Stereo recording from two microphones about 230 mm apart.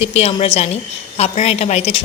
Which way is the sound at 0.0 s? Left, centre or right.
Left.